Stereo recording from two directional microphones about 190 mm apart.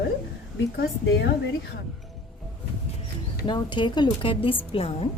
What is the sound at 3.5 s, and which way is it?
A woman's voice, 25° left (ahead or behind).